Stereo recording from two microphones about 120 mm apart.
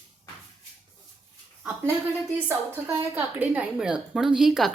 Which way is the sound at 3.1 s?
15° right (ahead or behind).